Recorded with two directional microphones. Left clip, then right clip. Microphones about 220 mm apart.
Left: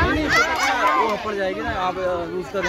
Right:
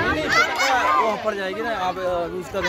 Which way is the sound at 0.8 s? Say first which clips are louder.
Even; 50° right (ahead or behind).